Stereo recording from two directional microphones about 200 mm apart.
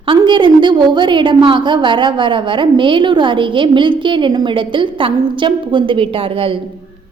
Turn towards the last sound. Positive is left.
turn(degrees=-25)  # may be behind; listen again after turning